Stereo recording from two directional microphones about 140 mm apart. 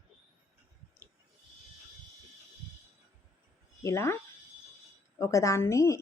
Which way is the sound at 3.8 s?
20° left (ahead or behind).